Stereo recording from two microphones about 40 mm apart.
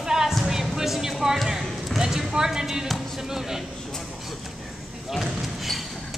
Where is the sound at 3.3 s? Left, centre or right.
Centre.